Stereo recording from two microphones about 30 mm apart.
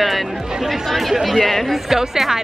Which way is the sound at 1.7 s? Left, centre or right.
Centre.